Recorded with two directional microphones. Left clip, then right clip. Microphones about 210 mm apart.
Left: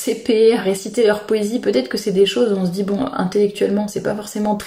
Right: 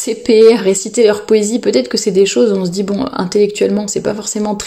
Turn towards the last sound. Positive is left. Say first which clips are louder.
# right 4 dB
turn(degrees=-35)  # may be behind; listen again after turning